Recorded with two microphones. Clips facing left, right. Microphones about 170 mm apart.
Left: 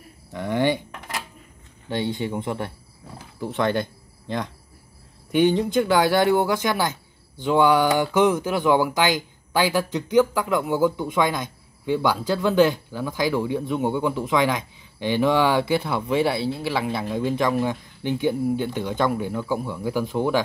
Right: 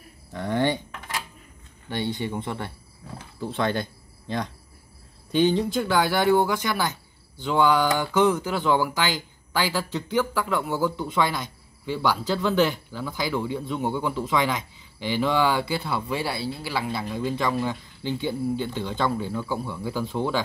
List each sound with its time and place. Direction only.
0.3 s speech: 20° left (ahead or behind)
2.0 s speech: 15° left (ahead or behind)
5.3 s speech: 15° left (ahead or behind)